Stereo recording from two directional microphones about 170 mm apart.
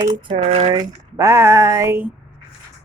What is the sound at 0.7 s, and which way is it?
Speech, 20° right (ahead or behind).